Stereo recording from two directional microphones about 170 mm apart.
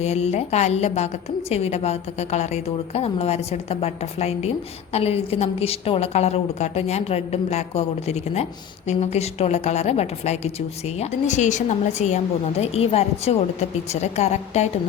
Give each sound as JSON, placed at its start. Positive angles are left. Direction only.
{"t": 0.0, "sound": "a woman's voice", "side_deg": 40}